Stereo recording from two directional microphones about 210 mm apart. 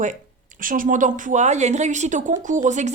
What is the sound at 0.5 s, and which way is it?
Speech, 40° right (ahead or behind).